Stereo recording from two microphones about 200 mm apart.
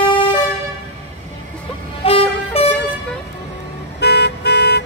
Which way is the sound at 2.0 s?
30° left (ahead or behind).